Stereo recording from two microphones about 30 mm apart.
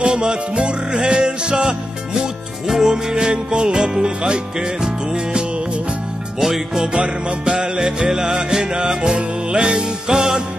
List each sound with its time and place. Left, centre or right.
0.0 s music: right
2.6 s music: centre
2.9 s music: right
6.4 s music: centre
7.0 s music: right
7.8 s music: centre